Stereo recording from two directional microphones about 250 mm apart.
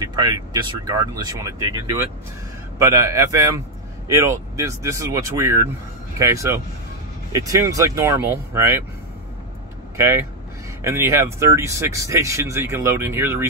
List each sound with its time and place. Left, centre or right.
0.1 s speech: centre
9.9 s speech: centre